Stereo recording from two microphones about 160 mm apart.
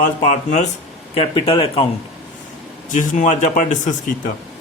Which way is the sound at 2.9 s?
50° left (ahead or behind).